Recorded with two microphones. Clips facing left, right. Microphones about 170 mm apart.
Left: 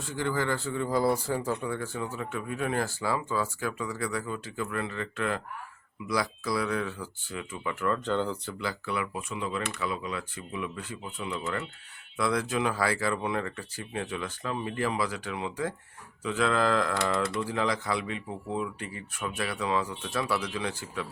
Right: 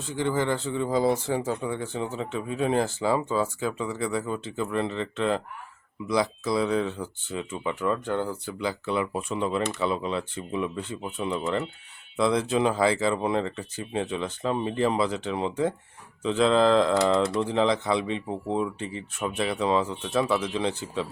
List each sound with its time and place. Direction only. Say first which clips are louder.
0.0 s speech: right 4 dB; 20° right (ahead or behind)
8.5 s speech: right 8 dB; 20° right (ahead or behind)